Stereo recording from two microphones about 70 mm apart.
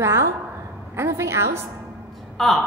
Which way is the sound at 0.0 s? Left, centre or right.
Right.